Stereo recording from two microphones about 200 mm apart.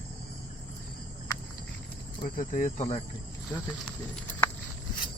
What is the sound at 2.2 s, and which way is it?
Speech, 40° left (ahead or behind).